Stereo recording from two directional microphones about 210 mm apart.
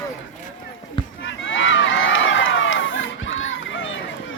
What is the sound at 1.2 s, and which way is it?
Run, 65° left (ahead or behind).